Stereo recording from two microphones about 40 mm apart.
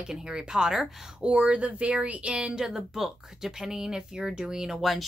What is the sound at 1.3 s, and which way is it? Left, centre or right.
Speech, right.